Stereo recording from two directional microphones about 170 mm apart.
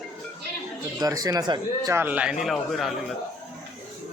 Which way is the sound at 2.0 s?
10° right (ahead or behind).